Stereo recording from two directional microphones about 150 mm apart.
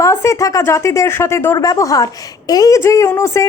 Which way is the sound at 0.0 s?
20° left (ahead or behind).